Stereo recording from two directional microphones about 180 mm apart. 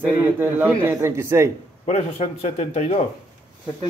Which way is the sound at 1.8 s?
35° left (ahead or behind).